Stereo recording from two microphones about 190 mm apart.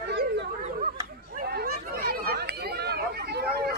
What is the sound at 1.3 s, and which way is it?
Chatter, 55° right (ahead or behind).